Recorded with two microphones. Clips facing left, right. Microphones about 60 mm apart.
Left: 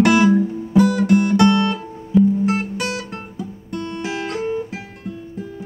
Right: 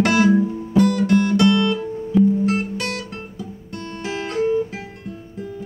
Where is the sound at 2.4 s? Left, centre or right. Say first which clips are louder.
Left 1 dB; centre.